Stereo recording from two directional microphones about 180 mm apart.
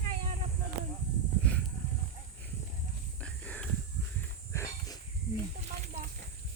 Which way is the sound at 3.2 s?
5° left (ahead or behind).